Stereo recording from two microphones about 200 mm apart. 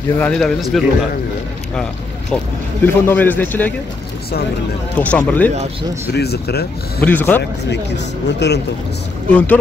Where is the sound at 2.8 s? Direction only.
10° left (ahead or behind).